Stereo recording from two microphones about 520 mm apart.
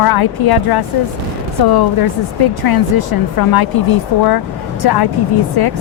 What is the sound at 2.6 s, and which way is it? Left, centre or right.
Speech, left.